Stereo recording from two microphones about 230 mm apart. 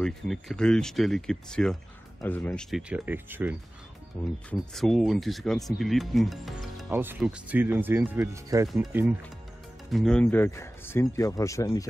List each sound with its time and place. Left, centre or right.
0.0 s speech: centre
4.1 s speech: centre